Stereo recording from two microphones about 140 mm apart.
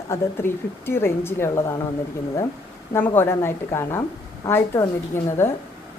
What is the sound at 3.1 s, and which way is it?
Speech, 15° left (ahead or behind).